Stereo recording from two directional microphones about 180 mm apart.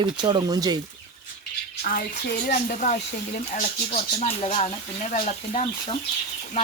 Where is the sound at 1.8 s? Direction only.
55° left (ahead or behind).